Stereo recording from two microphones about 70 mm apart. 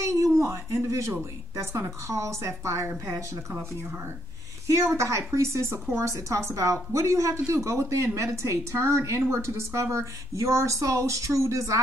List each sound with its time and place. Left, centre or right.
0.0 s a sound: right
1.6 s a woman's voice: right
4.6 s a woman's voice: right